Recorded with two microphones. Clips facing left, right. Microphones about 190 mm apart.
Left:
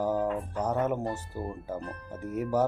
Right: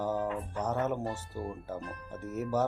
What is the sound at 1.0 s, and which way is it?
Speech, 35° left (ahead or behind).